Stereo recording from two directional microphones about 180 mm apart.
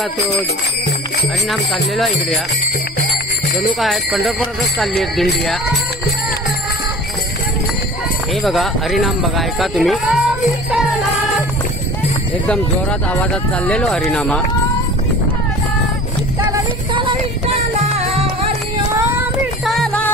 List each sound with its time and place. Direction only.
1.5 s jingle bell: centre (ahead or behind)
3.8 s jingle bell: centre (ahead or behind)
8.4 s jingle bell: centre (ahead or behind)
13.1 s jingle bell: 5° left (ahead or behind)
18.1 s music: 35° right (ahead or behind)
19.6 s music: centre (ahead or behind)